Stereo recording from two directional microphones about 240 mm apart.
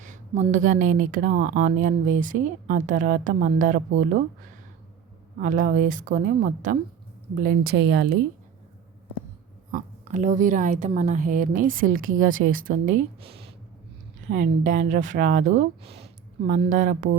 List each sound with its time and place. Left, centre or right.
0.0 s speech: right
5.4 s speech: right
9.7 s speech: right
12.9 s speech: right